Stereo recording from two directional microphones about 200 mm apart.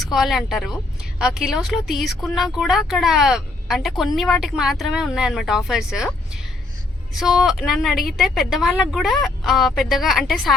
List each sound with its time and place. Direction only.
0.0 s speech: centre (ahead or behind)